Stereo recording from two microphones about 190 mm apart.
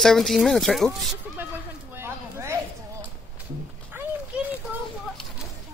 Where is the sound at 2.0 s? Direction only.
15° right (ahead or behind).